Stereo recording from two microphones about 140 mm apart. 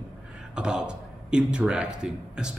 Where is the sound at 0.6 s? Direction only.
5° right (ahead or behind).